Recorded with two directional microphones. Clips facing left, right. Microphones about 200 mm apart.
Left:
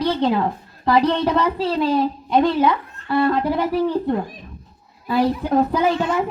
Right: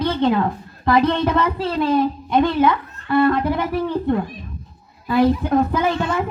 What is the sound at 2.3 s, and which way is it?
Speech, 35° left (ahead or behind).